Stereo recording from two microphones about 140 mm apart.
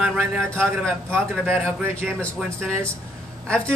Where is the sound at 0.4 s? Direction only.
5° left (ahead or behind).